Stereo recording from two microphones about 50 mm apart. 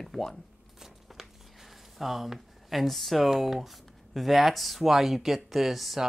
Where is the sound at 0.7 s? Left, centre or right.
Centre.